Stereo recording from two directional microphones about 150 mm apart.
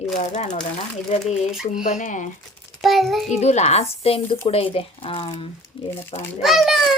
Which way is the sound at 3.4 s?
45° left (ahead or behind).